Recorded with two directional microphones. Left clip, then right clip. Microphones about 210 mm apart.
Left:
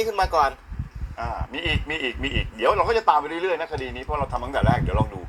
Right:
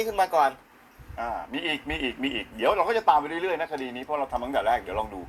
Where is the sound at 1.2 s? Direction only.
15° right (ahead or behind).